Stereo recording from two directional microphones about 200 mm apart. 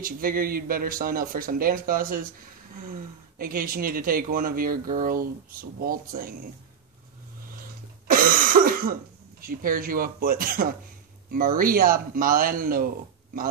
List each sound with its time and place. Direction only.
0.0 s speech: 45° right (ahead or behind)
8.1 s cough: 45° right (ahead or behind)
9.4 s speech: 45° right (ahead or behind)